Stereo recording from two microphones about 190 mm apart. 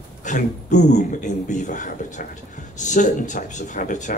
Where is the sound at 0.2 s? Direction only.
40° left (ahead or behind).